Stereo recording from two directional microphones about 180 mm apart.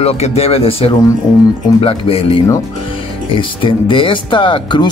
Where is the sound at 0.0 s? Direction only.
35° left (ahead or behind).